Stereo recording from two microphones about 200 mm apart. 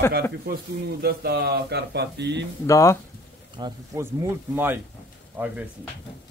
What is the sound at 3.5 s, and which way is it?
Speech, 15° right (ahead or behind).